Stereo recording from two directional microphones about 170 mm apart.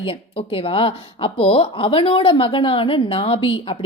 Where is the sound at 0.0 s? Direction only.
30° left (ahead or behind).